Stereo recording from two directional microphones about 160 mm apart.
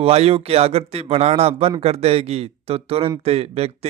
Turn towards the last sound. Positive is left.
turn(degrees=-40)  # may be behind; listen again after turning